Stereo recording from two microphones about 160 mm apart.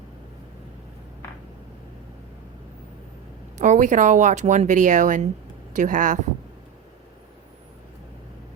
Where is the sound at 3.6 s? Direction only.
50° right (ahead or behind).